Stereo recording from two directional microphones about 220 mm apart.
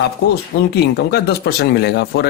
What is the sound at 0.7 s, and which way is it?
Speech, 50° left (ahead or behind).